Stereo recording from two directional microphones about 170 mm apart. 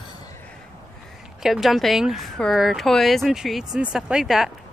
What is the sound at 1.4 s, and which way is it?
A woman's voice, centre (ahead or behind).